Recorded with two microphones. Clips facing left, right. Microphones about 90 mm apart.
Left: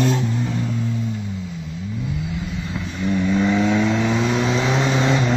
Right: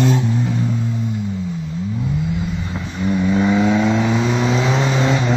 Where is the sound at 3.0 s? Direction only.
10° right (ahead or behind).